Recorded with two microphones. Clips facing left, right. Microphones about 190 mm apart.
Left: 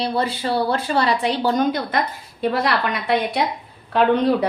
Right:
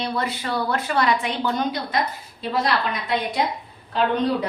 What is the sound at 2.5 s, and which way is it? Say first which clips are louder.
Speech: right 2 dB; 65° left (ahead or behind).